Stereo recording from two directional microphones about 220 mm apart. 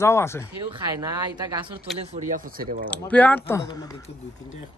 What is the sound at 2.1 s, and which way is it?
Speech, 40° right (ahead or behind).